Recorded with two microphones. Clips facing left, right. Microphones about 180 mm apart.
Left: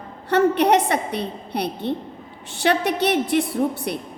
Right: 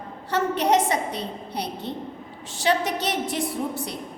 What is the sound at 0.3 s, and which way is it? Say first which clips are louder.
A woman's voice: left 5 dB; 60° left (ahead or behind).